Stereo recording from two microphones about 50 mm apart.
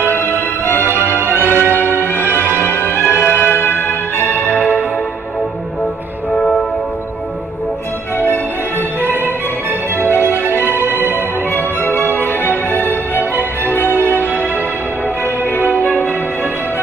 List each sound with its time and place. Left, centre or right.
0.1 s music: left
1.3 s music: right
2.1 s music: left
2.9 s music: right
3.2 s music: left
4.2 s music: right
9.0 s music: right
11.0 s music: left
15.8 s music: left